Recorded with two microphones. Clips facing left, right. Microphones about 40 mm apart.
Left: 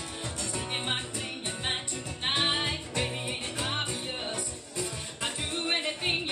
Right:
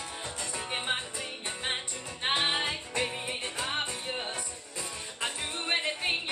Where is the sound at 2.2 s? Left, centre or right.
Centre.